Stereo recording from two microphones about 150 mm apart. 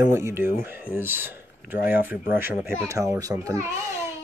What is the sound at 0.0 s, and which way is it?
Speech, 20° right (ahead or behind).